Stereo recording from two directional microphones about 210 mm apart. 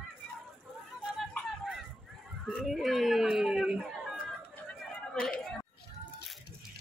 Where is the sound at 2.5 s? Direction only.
Centre (ahead or behind).